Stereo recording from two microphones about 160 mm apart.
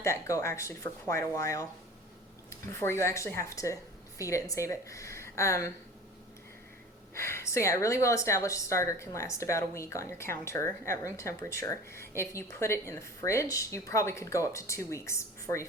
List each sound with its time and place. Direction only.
0.0 s a woman's voice: 20° left (ahead or behind)
7.2 s speech: 15° left (ahead or behind)